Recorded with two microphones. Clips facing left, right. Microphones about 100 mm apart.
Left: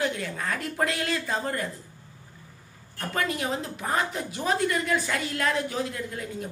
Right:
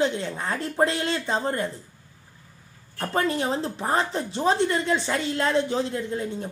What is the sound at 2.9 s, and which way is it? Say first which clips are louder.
Speech: right 4 dB; 30° right (ahead or behind).